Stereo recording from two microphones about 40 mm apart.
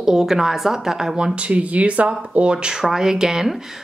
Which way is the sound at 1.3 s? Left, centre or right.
Right.